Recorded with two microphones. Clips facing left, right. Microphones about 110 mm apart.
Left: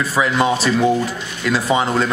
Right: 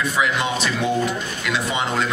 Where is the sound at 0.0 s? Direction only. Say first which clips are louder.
Left 4 dB; 35° left (ahead or behind).